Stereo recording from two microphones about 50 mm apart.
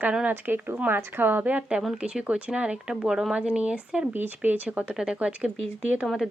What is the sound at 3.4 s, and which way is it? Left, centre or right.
Speech, right.